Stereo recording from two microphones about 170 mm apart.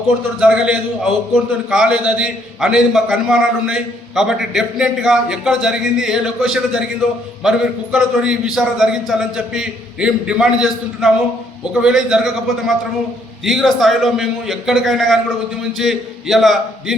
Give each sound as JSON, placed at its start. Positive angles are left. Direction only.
{"t": 0.3, "sound": "a man's voice", "side_deg": -5}
{"t": 7.9, "sound": "a man's voice", "side_deg": -5}